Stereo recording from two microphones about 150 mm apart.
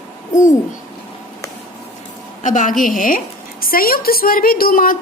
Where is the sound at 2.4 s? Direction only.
60° left (ahead or behind).